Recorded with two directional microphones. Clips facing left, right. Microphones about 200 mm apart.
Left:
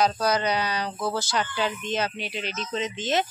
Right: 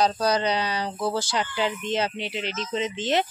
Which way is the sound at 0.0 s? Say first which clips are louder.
Right 1 dB; 30° right (ahead or behind).